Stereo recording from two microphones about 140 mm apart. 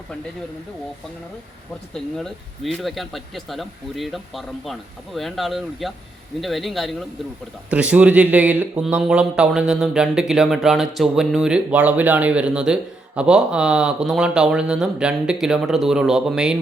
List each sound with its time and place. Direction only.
1.9 s speech: 5° left (ahead or behind)